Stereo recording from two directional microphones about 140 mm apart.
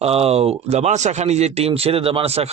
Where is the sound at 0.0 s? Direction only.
45° right (ahead or behind).